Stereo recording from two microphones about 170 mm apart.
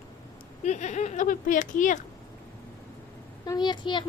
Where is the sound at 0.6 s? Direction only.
45° left (ahead or behind).